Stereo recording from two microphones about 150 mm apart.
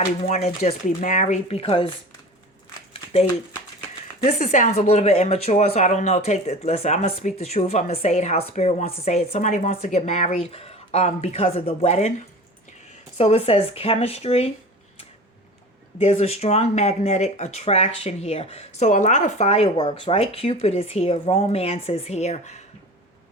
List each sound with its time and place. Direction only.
0.3 s speech: 50° left (ahead or behind)
2.9 s a sound: 45° left (ahead or behind)
4.2 s speech: 45° left (ahead or behind)
13.1 s speech: 45° left (ahead or behind)
16.0 s speech: 45° left (ahead or behind)